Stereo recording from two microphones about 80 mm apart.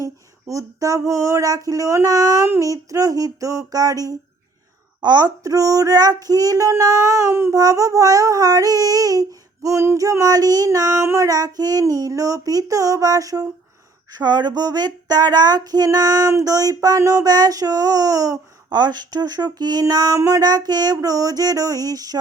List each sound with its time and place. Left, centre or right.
0.0 s child singing: right
7.5 s child singing: right
9.6 s child singing: right
11.0 s child singing: right
11.3 s child singing: right
14.1 s a sound: right
16.3 s child singing: right
20.1 s child singing: right